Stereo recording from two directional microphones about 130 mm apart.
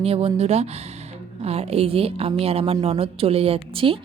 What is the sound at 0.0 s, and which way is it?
A woman's voice, 50° right (ahead or behind).